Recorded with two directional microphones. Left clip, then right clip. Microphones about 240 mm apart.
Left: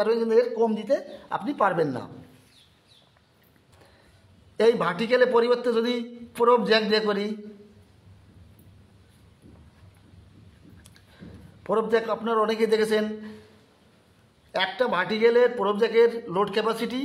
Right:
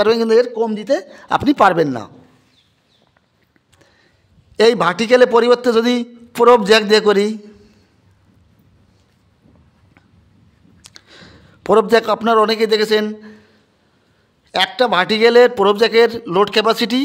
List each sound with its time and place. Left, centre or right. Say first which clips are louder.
0.0 s a man's voice: right 9 dB; right
4.6 s a man's voice: right 8 dB; right
10.8 s a man's voice: right 12 dB; right
14.5 s a man's voice: right 9 dB; right